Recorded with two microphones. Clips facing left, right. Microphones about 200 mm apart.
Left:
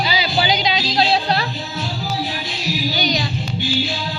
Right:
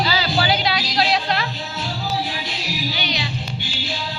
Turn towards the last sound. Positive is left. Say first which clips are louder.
# left 6 dB
turn(degrees=45)  # may be behind; listen again after turning